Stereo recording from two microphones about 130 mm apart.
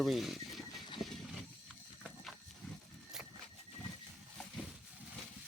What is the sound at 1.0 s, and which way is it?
Wild animals, centre (ahead or behind).